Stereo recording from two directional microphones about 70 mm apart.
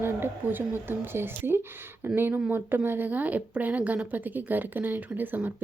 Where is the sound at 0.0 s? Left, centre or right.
Right.